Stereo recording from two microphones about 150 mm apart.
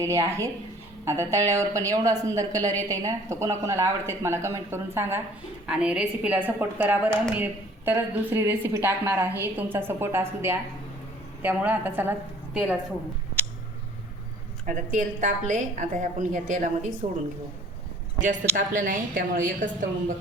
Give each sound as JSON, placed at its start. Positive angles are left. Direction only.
{"t": 0.0, "sound": "a woman's voice", "side_deg": -20}
{"t": 14.7, "sound": "a woman's voice", "side_deg": -60}
{"t": 18.2, "sound": "a woman's voice", "side_deg": -60}